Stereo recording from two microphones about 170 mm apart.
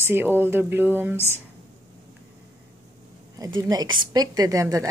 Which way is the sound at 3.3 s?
20° right (ahead or behind).